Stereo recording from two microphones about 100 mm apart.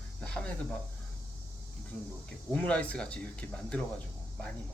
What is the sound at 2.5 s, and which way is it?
Speech, 15° left (ahead or behind).